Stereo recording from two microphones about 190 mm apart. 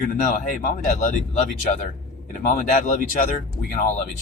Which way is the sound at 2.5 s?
45° left (ahead or behind).